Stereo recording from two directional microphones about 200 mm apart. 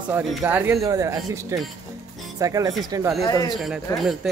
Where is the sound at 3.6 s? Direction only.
Centre (ahead or behind).